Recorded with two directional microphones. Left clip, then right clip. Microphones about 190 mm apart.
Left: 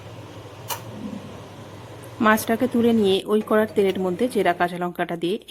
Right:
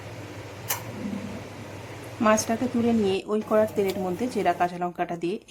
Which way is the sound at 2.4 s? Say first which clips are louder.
Left 5 dB; 20° left (ahead or behind).